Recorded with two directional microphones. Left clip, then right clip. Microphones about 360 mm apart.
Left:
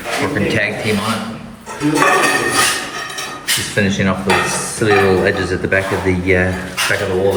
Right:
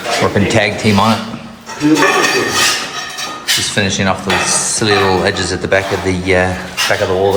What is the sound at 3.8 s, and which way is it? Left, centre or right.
Speech, centre.